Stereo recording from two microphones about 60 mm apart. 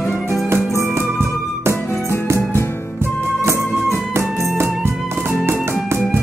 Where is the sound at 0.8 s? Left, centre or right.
Right.